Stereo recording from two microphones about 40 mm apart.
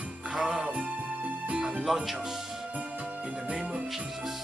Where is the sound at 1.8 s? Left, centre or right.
Centre.